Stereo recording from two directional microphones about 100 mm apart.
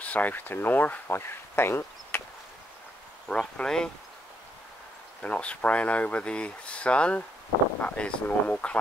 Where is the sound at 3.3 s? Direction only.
10° left (ahead or behind).